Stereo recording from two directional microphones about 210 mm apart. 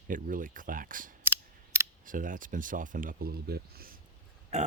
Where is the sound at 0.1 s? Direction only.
40° right (ahead or behind).